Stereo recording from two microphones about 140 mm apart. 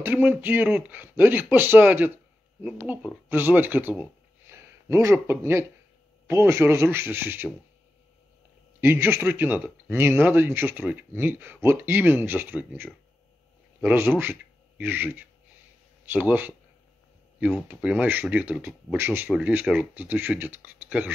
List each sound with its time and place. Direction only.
0.0 s speech: 15° right (ahead or behind)
8.8 s speech: 15° right (ahead or behind)